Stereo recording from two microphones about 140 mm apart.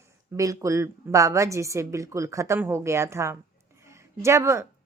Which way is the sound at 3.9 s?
20° right (ahead or behind).